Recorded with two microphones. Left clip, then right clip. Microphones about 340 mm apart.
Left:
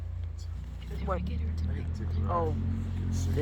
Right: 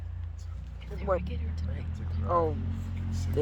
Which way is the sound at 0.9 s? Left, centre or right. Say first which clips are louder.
Right 5 dB; centre.